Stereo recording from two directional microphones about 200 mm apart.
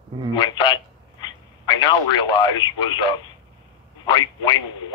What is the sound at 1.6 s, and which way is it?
Speech, 20° left (ahead or behind).